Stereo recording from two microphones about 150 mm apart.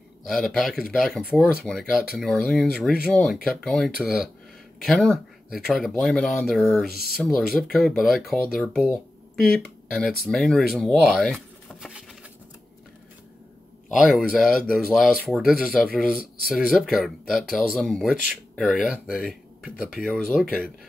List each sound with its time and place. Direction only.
0.2 s speech: centre (ahead or behind)
13.8 s speech: 5° right (ahead or behind)